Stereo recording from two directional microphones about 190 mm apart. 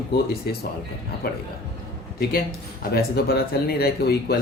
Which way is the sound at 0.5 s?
55° left (ahead or behind).